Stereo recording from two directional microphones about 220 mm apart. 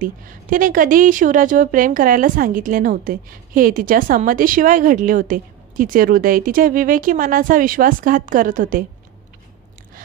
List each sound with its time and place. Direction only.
0.0 s a woman's voice: 40° right (ahead or behind)